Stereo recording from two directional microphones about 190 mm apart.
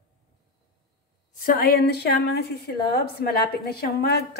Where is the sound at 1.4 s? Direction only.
50° left (ahead or behind).